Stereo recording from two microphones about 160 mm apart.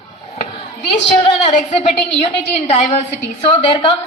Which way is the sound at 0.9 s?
35° left (ahead or behind).